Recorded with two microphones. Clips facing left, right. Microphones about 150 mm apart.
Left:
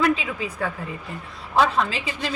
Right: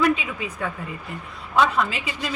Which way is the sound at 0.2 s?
30° left (ahead or behind).